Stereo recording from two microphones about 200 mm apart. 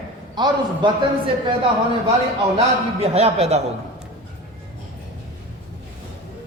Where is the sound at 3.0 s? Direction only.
30° right (ahead or behind).